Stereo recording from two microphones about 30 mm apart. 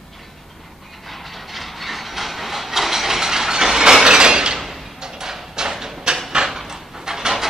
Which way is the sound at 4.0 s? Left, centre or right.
Right.